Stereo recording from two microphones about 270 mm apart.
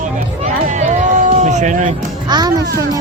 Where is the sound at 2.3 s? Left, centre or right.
Centre.